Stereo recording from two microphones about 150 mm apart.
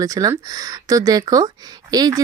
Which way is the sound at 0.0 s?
25° right (ahead or behind).